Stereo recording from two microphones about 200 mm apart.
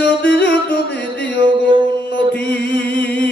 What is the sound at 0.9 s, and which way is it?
Music, 5° left (ahead or behind).